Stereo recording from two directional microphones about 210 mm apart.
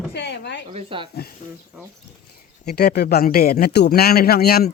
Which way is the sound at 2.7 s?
50° left (ahead or behind).